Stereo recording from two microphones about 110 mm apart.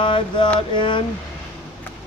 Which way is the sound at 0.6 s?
50° left (ahead or behind).